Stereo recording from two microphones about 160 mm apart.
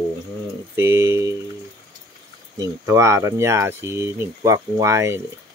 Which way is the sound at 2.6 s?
20° right (ahead or behind).